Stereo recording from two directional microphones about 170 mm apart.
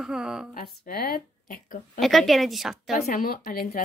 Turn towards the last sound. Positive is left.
turn(degrees=60)  # may be behind; listen again after turning